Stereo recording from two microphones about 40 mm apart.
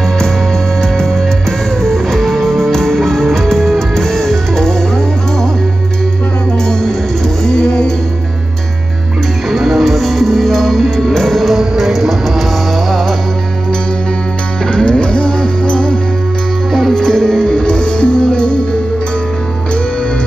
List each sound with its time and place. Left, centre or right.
1.8 s music: centre
7.4 s music: centre
9.5 s music: centre
14.9 s music: left
16.9 s music: centre